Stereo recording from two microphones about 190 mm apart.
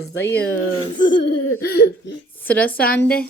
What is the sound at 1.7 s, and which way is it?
Speech, 55° left (ahead or behind).